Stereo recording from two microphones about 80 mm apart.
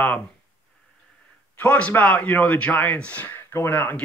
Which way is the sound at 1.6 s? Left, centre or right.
Centre.